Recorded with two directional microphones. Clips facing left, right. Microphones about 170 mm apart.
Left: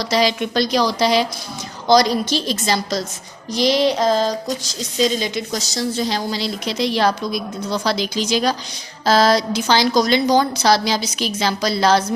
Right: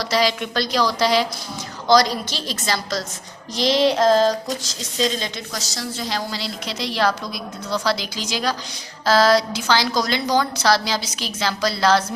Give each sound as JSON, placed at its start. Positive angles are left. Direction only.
{"t": 0.0, "sound": "a woman's voice", "side_deg": 20}
{"t": 3.5, "sound": "a sound", "side_deg": 0}
{"t": 6.0, "sound": "a woman's voice", "side_deg": 20}